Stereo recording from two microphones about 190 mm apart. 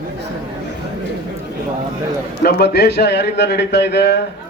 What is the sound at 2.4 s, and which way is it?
Speech, 55° left (ahead or behind).